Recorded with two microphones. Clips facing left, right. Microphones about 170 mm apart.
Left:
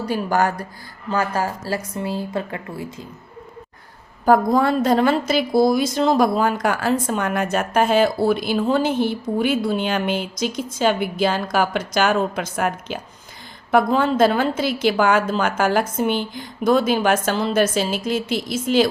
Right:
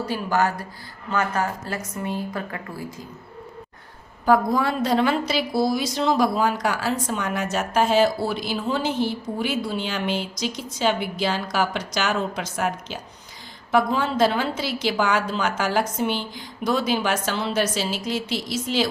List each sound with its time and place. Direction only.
0.0 s a woman's voice: 45° left (ahead or behind)
1.1 s a woman's voice: 30° left (ahead or behind)
4.3 s a woman's voice: 50° left (ahead or behind)